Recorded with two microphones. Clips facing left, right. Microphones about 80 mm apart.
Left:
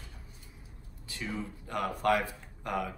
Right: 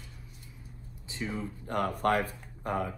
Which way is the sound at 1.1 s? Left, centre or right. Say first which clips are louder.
Right 2 dB; right.